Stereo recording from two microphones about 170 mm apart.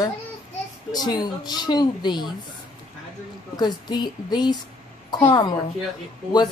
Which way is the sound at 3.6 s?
25° left (ahead or behind).